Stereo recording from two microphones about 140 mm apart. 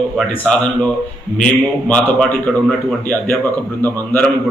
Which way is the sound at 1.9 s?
10° left (ahead or behind).